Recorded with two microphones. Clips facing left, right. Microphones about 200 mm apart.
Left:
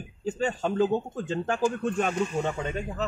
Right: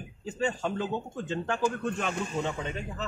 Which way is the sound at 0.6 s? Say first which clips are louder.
Left 7 dB; 40° left (ahead or behind).